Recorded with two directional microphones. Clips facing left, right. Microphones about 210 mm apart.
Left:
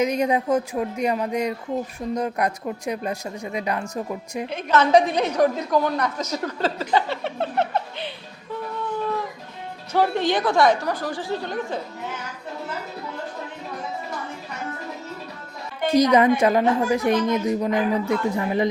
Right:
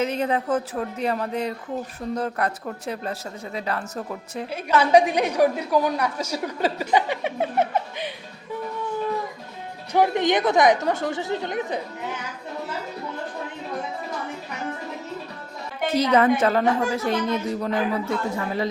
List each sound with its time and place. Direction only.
0.0 s a woman's voice: 10° left (ahead or behind)
4.5 s a woman's voice: 10° right (ahead or behind)
9.9 s a woman's voice: 15° right (ahead or behind)
15.9 s a woman's voice: 15° left (ahead or behind)